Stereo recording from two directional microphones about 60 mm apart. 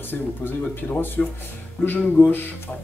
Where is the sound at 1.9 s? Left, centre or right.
Left.